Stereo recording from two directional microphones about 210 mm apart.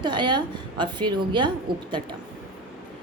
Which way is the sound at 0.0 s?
20° right (ahead or behind).